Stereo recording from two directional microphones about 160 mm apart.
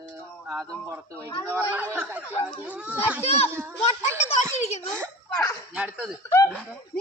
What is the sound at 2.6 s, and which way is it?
Speech, 10° right (ahead or behind).